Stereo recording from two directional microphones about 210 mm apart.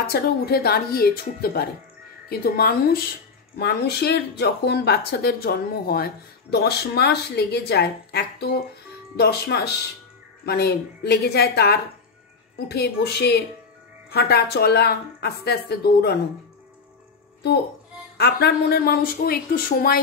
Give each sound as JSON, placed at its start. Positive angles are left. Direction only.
{"t": 0.1, "sound": "speech", "side_deg": 45}
{"t": 18.1, "sound": "speech", "side_deg": 50}